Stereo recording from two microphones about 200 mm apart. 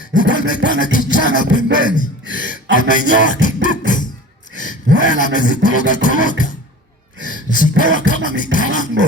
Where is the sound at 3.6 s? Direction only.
40° left (ahead or behind).